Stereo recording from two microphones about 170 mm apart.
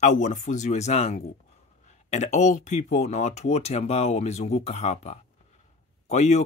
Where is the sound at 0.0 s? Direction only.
45° left (ahead or behind).